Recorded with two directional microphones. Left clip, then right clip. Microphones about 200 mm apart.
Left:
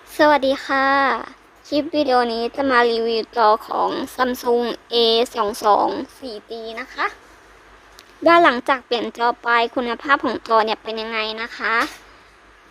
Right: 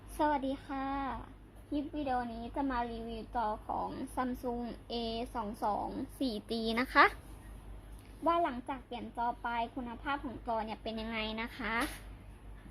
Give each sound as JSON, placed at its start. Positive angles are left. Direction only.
{"t": 0.2, "sound": "a woman's voice", "side_deg": 35}
{"t": 3.8, "sound": "a woman's voice", "side_deg": 35}
{"t": 6.2, "sound": "a child's voice", "side_deg": 0}
{"t": 8.2, "sound": "a woman's voice", "side_deg": 40}
{"t": 10.9, "sound": "speech", "side_deg": 20}